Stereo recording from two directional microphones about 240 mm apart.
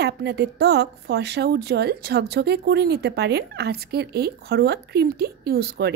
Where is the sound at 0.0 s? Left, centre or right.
Right.